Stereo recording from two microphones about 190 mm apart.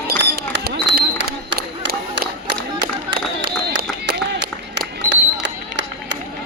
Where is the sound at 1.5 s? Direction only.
70° right (ahead or behind).